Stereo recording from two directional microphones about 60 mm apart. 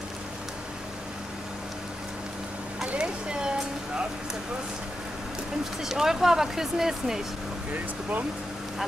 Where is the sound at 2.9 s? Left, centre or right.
Centre.